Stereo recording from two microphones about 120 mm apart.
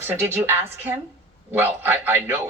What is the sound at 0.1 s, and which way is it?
A woman's voice, 20° right (ahead or behind).